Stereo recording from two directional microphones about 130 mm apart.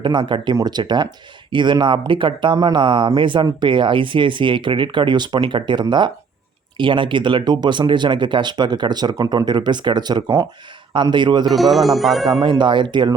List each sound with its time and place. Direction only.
0.0 s speech: 35° right (ahead or behind)
11.5 s speech: centre (ahead or behind)
12.4 s speech: 35° right (ahead or behind)